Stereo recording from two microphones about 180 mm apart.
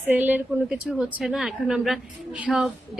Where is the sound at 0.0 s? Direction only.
10° right (ahead or behind).